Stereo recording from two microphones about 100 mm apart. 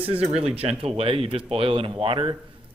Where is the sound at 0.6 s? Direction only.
85° right; by 2.3 s 70° right (ahead or behind).